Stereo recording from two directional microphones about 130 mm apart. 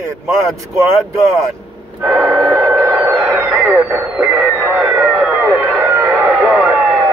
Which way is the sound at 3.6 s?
15° right (ahead or behind).